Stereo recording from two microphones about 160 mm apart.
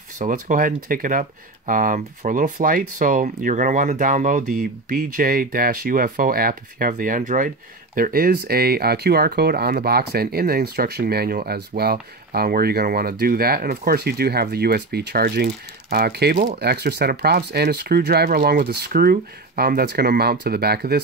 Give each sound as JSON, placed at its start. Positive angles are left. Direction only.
{"t": 0.2, "sound": "speech", "side_deg": -55}